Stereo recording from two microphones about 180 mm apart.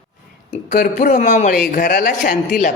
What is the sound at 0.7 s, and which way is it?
A woman's voice, 45° left (ahead or behind).